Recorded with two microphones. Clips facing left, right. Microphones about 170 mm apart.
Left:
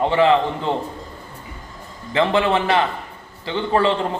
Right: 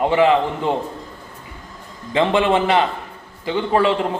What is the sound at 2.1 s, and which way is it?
A man's voice, 20° right (ahead or behind).